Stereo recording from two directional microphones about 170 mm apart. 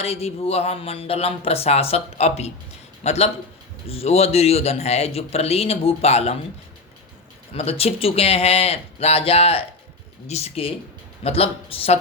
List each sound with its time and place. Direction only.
0.0 s a man's voice: 35° left (ahead or behind)
7.5 s a man's voice: 35° left (ahead or behind)